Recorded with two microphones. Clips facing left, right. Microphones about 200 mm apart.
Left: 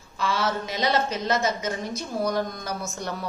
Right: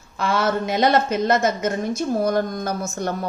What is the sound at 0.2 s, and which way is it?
A woman's voice, 55° right (ahead or behind).